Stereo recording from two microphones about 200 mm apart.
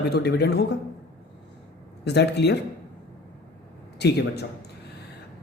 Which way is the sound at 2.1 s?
55° left (ahead or behind).